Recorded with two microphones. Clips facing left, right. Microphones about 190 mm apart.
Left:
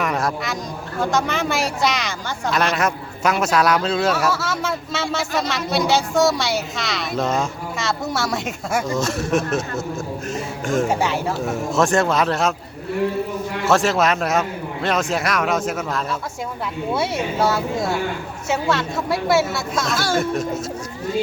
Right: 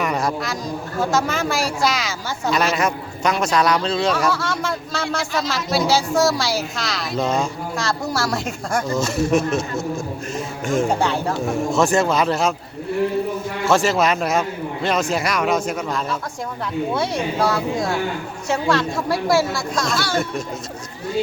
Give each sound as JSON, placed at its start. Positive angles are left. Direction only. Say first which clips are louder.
{"t": 0.0, "sound": "a sound", "louder": "right 1 dB", "side_deg": 0}
{"t": 1.1, "sound": "speech", "louder": "even", "side_deg": 0}
{"t": 13.7, "sound": "speech", "louder": "even", "side_deg": 0}
{"t": 20.0, "sound": "speech", "louder": "left 4 dB", "side_deg": 45}